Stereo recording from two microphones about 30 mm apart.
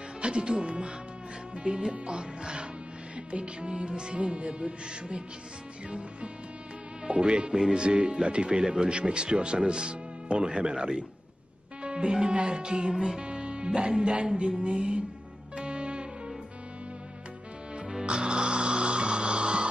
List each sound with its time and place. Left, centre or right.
0.2 s speech: right
12.9 s speech: centre
13.2 s speech: right
15.5 s music: right
18.0 s music: right